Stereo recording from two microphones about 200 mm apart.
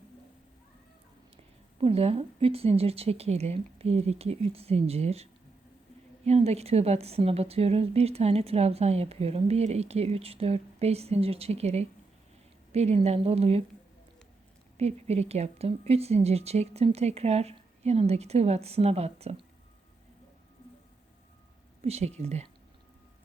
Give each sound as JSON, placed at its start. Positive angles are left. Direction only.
{"t": 1.8, "sound": "speech", "side_deg": -30}
{"t": 14.8, "sound": "speech", "side_deg": -30}
{"t": 21.8, "sound": "speech", "side_deg": -30}